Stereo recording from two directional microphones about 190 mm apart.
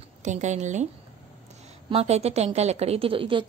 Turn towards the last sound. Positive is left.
turn(degrees=-30)  # may be behind; listen again after turning